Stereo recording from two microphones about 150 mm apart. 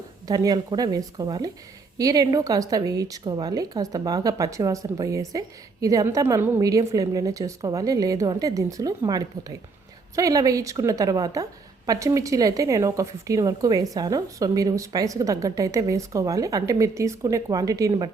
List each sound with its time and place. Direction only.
0.3 s a woman's voice: 25° right (ahead or behind)